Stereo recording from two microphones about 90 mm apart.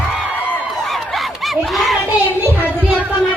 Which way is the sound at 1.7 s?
Centre (ahead or behind).